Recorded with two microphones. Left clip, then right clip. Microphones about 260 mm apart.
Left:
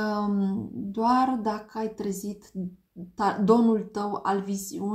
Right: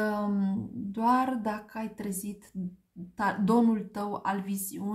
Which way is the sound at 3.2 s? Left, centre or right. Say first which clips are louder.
Left 4 dB; right.